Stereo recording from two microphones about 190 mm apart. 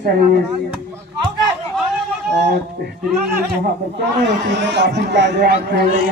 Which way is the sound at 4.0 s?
65° right (ahead or behind).